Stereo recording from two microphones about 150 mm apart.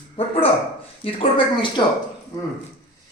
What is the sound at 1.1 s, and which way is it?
Speech, 35° left (ahead or behind).